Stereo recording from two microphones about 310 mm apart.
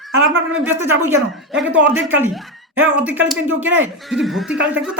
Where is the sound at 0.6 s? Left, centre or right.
Centre.